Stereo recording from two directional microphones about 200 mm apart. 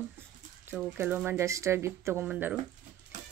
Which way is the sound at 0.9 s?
5° right (ahead or behind).